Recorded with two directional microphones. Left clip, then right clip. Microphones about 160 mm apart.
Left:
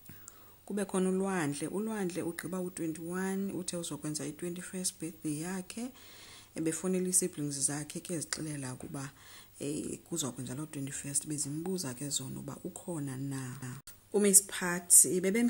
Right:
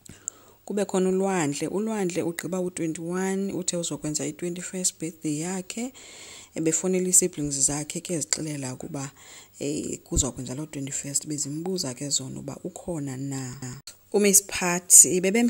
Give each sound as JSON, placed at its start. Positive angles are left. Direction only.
{"t": 0.2, "sound": "speech", "side_deg": -35}